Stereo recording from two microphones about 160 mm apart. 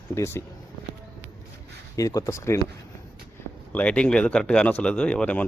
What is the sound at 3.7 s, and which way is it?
A man's voice, 5° left (ahead or behind).